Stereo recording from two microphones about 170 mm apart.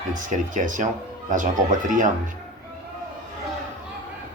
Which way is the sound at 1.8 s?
50° right (ahead or behind).